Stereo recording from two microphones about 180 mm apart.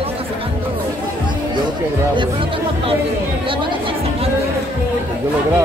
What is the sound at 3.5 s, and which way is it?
Chatter, 30° right (ahead or behind).